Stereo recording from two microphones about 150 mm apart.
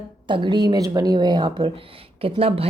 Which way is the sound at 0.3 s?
30° right (ahead or behind).